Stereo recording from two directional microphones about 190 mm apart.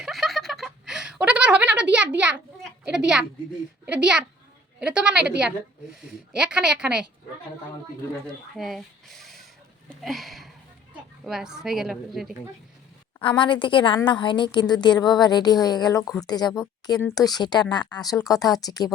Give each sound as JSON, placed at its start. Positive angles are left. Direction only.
{"t": 0.0, "sound": "a sound", "side_deg": 0}
{"t": 2.9, "sound": "a woman's voice", "side_deg": -5}
{"t": 6.3, "sound": "a woman's voice", "side_deg": -5}
{"t": 8.5, "sound": "a woman's voice", "side_deg": 0}
{"t": 13.4, "sound": "a woman's voice", "side_deg": 25}